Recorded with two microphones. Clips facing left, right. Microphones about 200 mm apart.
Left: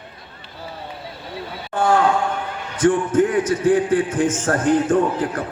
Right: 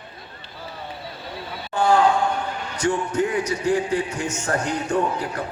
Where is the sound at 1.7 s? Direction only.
50° left (ahead or behind).